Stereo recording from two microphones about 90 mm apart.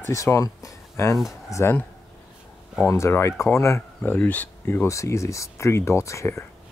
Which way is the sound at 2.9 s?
30° left (ahead or behind).